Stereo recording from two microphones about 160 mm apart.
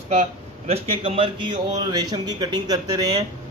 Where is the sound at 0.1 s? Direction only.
45° right (ahead or behind).